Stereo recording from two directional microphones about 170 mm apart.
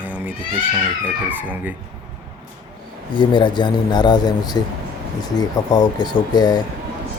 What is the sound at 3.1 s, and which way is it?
Speech, 30° left (ahead or behind).